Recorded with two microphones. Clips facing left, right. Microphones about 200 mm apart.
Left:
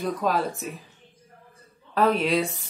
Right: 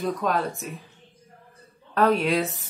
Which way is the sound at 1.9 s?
Centre (ahead or behind).